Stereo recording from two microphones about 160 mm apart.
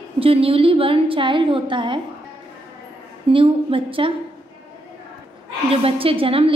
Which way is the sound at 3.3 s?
35° right (ahead or behind).